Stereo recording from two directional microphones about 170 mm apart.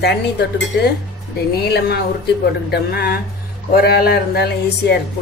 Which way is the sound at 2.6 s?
65° left (ahead or behind).